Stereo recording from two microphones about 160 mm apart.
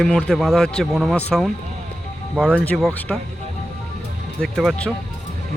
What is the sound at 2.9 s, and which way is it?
Speech, 10° left (ahead or behind).